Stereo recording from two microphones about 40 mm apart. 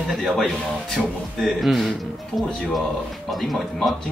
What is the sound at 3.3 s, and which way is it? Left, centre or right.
Speech, centre.